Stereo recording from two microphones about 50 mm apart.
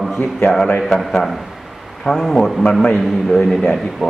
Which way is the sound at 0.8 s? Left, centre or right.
Centre.